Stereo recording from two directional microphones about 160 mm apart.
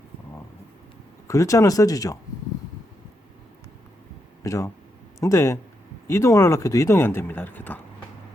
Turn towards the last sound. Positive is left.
turn(degrees=10)  # may be behind; listen again after turning